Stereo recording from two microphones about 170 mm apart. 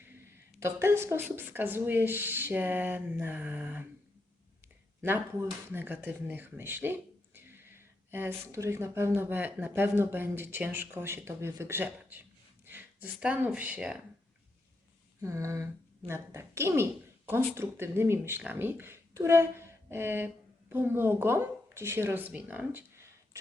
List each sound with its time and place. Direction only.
0.6 s speech: 15° right (ahead or behind)
5.0 s speech: 15° right (ahead or behind)
15.2 s speech: 15° right (ahead or behind)